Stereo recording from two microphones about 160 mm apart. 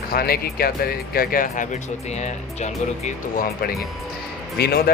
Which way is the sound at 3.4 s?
70° left (ahead or behind).